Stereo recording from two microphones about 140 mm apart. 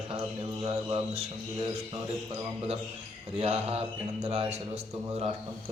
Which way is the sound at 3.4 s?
45° right (ahead or behind).